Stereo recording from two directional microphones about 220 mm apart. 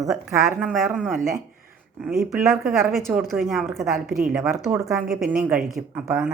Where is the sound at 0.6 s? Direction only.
5° right (ahead or behind).